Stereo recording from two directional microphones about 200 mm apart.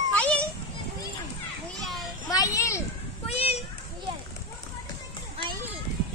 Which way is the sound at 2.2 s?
20° left (ahead or behind).